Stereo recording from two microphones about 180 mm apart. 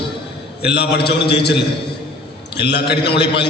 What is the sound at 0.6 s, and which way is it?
Speech, 65° left (ahead or behind).